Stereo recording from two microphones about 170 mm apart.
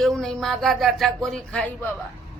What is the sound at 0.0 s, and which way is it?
Speech, 5° left (ahead or behind).